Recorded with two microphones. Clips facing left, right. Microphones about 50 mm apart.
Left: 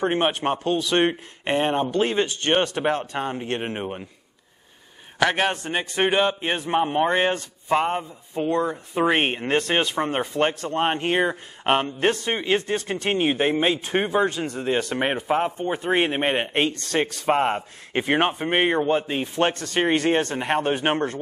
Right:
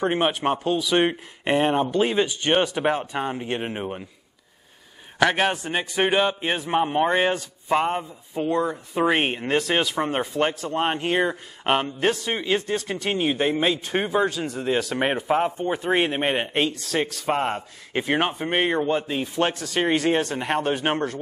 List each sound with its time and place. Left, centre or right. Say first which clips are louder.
0.0 s speech: even; centre
5.2 s speech: right 1 dB; centre
10.8 s a man's voice: left 1 dB; centre
19.2 s a man's voice: left 1 dB; centre